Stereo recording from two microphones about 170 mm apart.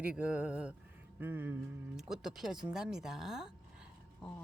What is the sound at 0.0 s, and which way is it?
Speech, 5° right (ahead or behind).